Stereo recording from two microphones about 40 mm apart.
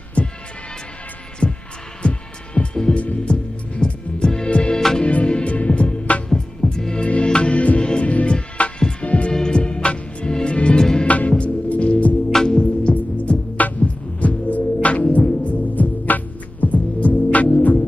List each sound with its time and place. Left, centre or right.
0.2 s music: left
1.4 s heart sounds: left
2.0 s music: left
4.7 s music: centre
5.0 s music: left
6.3 s music: centre
9.3 s music: left
10.8 s music: centre
11.1 s music: left
12.3 s music: centre
12.9 s music: left